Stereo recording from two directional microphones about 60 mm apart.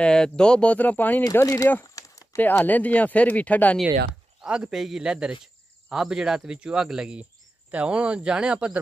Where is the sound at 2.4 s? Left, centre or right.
Left.